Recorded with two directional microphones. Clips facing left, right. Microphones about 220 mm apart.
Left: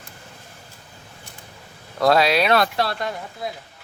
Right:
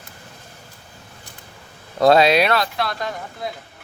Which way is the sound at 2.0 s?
25° right (ahead or behind).